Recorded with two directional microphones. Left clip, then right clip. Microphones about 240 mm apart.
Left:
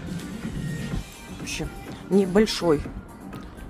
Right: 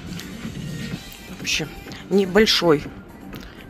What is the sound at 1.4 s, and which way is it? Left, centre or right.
Speech, centre.